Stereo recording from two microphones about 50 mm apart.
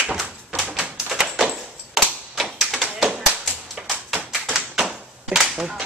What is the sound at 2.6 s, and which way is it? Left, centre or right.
Tap, centre.